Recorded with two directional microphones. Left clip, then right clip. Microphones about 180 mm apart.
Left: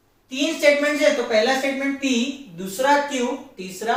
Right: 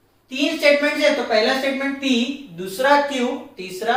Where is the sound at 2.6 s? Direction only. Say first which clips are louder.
Right 2 dB; 15° right (ahead or behind).